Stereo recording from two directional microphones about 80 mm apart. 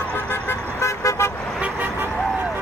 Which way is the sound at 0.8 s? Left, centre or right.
Left.